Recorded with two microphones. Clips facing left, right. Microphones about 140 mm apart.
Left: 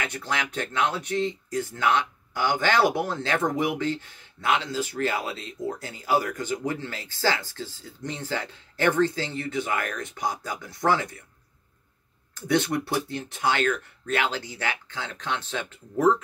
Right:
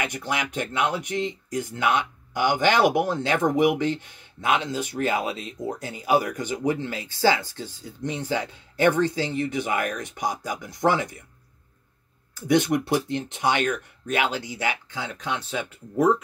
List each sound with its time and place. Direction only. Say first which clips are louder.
0.0 s speech: right 2 dB; 15° right (ahead or behind)
12.4 s speech: right 3 dB; 15° right (ahead or behind)